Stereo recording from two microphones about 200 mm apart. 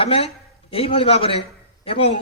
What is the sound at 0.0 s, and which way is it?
A man's voice, 30° left (ahead or behind).